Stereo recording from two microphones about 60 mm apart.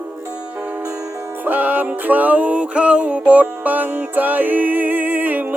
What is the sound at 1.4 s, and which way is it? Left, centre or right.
Music, right.